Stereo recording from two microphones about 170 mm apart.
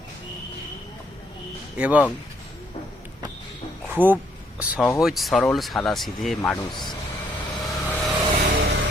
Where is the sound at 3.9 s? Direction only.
10° right (ahead or behind).